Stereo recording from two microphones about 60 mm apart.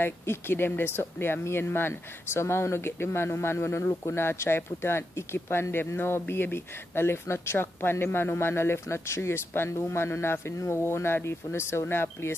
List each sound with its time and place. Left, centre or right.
0.0 s speech: left